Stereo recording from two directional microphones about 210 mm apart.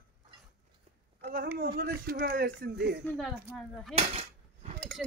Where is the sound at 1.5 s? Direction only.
45° right (ahead or behind).